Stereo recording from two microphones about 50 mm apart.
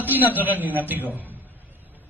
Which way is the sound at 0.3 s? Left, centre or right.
Right.